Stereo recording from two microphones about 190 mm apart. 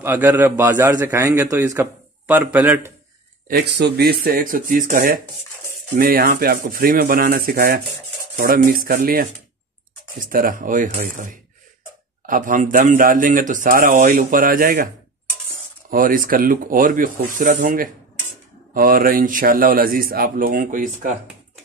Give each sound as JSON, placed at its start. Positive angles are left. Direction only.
{"t": 0.0, "sound": "a man's voice", "side_deg": -10}
{"t": 3.4, "sound": "speech", "side_deg": -60}
{"t": 10.3, "sound": "speech", "side_deg": -45}
{"t": 15.9, "sound": "speech", "side_deg": -45}